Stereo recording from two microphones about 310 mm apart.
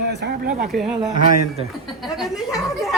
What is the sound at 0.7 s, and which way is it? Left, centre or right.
Speech, centre.